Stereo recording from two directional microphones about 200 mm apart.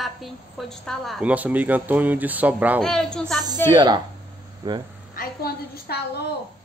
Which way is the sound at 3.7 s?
20° right (ahead or behind).